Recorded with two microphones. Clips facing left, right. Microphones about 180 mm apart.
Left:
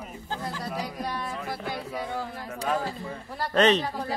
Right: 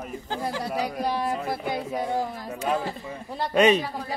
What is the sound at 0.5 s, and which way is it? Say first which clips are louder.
Chatter: right 5 dB; 70° right (ahead or behind).